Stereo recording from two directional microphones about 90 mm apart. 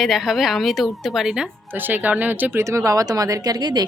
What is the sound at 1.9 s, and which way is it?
Speech, 20° right (ahead or behind).